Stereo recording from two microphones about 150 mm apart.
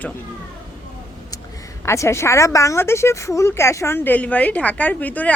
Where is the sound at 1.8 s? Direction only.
20° left (ahead or behind).